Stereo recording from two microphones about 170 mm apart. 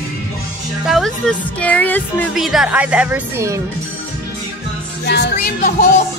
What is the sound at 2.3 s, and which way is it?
Speech, centre (ahead or behind).